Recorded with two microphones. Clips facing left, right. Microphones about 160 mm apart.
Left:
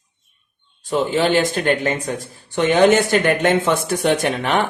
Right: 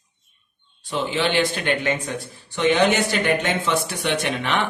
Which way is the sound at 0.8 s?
45° left (ahead or behind).